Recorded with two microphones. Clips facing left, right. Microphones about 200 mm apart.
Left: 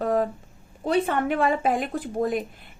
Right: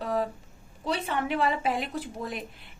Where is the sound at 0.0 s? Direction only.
50° left (ahead or behind).